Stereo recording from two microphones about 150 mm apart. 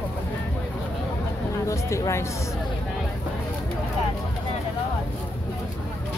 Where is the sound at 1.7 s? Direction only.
20° left (ahead or behind).